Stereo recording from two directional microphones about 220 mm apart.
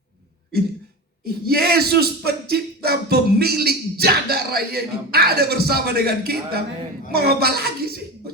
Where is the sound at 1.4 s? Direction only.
45° right (ahead or behind).